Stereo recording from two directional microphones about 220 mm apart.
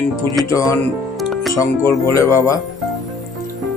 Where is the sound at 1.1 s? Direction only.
Centre (ahead or behind).